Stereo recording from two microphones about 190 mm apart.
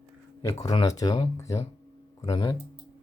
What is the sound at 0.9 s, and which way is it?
Speech, 20° left (ahead or behind).